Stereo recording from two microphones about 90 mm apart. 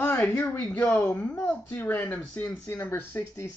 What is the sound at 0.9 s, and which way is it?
Speech, 20° left (ahead or behind).